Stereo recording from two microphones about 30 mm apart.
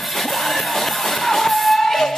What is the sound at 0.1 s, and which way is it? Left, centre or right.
Music, centre.